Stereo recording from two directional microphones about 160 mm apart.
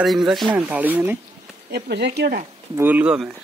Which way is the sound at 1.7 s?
90° right.